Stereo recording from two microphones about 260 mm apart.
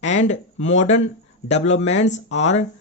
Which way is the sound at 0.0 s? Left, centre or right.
Left.